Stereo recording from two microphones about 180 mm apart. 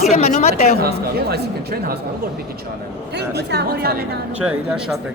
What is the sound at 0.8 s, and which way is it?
Speech, 60° right (ahead or behind).